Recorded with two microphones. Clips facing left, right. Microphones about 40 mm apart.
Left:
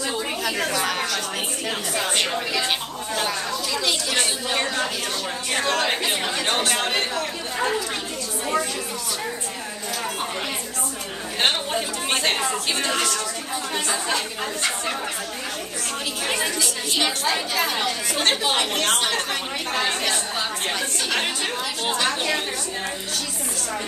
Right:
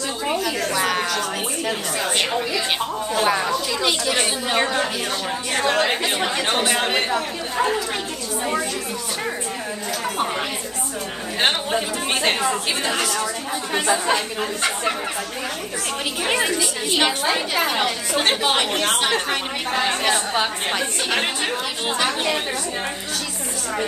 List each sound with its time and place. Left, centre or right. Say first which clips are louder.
0.3 s a sound: right 5 dB; centre
1.7 s a woman's voice: right 1 dB; centre
3.3 s a woman's voice: right 6 dB; centre
11.4 s a woman's voice: right 2 dB; centre
16.3 s a woman's voice: right 4 dB; centre